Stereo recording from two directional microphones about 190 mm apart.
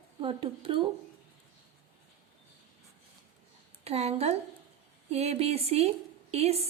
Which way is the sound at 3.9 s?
35° right (ahead or behind).